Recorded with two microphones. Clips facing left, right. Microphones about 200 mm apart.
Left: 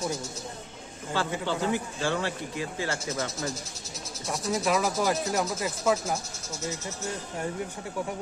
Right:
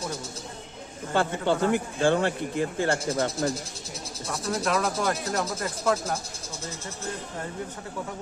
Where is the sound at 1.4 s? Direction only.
55° right (ahead or behind).